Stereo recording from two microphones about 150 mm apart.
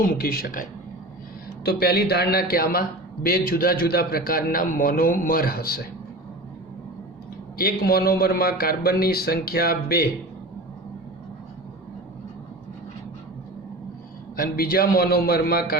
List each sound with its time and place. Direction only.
0.0 s a man's voice: 75° left (ahead or behind)
1.6 s a man's voice: 90° left
3.2 s a man's voice: 75° left (ahead or behind)
7.6 s a man's voice: 90° left
14.3 s a man's voice: 75° left (ahead or behind); by 15.6 s 90° left